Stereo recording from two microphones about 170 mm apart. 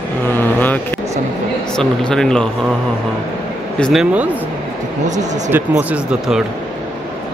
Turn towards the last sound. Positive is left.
turn(degrees=-5)  # may be behind; listen again after turning